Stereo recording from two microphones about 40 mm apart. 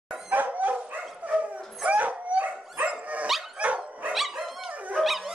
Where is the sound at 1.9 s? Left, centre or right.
Right.